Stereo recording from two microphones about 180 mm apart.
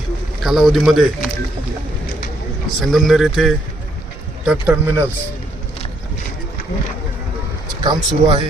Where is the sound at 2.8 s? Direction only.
Centre (ahead or behind).